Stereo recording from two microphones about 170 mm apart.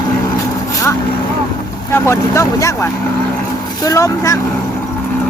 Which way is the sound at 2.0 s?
15° left (ahead or behind).